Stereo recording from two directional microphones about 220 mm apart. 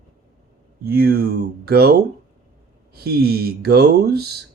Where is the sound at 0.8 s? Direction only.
45° right (ahead or behind).